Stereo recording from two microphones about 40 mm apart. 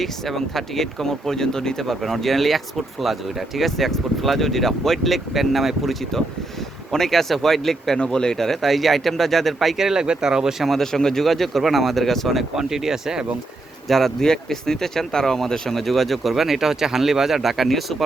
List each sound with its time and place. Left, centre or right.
0.0 s speech: centre
7.9 s speech: centre
9.7 s speech: centre
10.6 s speech: centre
12.5 s speech: centre
13.8 s speech: centre